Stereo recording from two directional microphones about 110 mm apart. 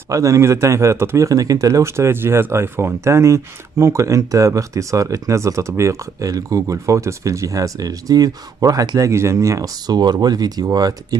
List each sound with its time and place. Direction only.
0.1 s speech: 30° right (ahead or behind)